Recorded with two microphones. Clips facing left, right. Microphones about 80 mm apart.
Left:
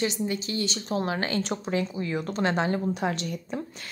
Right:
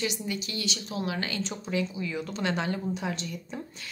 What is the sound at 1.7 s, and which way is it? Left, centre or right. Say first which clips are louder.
Speech: left 1 dB; left.